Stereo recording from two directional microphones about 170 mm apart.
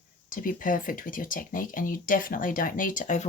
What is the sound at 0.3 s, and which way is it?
Speech, 50° left (ahead or behind).